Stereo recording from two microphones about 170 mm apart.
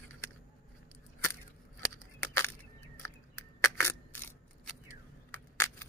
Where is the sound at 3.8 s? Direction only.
15° left (ahead or behind).